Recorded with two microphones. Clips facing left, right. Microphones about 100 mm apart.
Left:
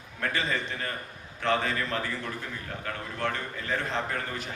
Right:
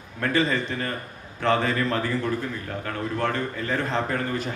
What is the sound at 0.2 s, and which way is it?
Speech, 40° right (ahead or behind).